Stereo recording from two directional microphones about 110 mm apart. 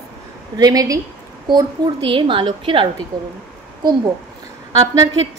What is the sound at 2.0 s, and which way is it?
Speech, 50° right (ahead or behind).